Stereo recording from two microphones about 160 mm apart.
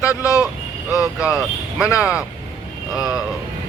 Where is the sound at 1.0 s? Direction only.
5° right (ahead or behind).